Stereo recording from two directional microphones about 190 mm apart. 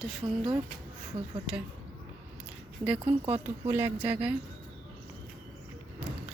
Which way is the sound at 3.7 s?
10° right (ahead or behind).